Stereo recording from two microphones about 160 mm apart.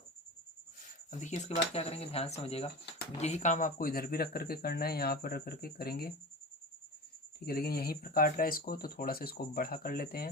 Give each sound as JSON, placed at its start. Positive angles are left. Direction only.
{"t": 1.2, "sound": "speech", "side_deg": 45}
{"t": 7.3, "sound": "speech", "side_deg": 70}